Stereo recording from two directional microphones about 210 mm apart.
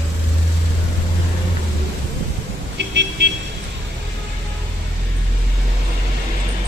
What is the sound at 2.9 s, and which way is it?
Vehicle, 55° right (ahead or behind).